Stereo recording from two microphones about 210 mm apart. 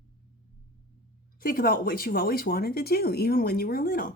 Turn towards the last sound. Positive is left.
turn(degrees=40)  # may be behind; listen again after turning